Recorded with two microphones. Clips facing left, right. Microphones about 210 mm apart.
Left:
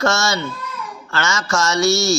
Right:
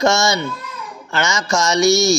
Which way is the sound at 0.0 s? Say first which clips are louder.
Right 3 dB; 15° right (ahead or behind).